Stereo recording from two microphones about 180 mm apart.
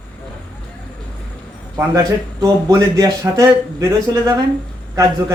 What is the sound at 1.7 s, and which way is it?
A man's voice, 20° right (ahead or behind).